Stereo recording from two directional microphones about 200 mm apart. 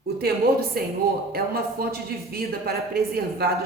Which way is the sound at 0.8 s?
50° right (ahead or behind).